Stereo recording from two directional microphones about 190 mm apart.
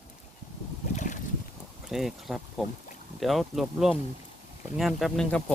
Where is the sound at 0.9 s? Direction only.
40° left (ahead or behind).